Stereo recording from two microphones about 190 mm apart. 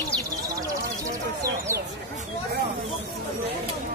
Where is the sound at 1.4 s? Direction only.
15° right (ahead or behind).